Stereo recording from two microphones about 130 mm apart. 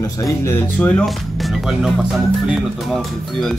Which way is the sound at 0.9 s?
5° left (ahead or behind).